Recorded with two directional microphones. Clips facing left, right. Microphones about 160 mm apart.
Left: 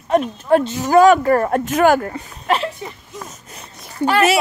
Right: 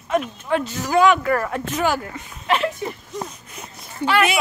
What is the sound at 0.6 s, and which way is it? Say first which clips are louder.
Speech: left 5 dB; 20° left (ahead or behind).